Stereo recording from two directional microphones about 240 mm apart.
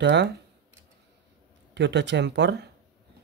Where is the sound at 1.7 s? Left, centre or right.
Right.